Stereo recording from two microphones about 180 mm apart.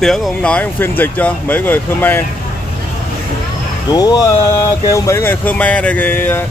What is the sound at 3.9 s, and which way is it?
Speech, 20° left (ahead or behind).